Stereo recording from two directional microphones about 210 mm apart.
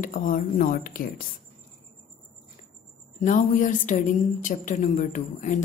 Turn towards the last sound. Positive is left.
turn(degrees=35)  # may be behind; listen again after turning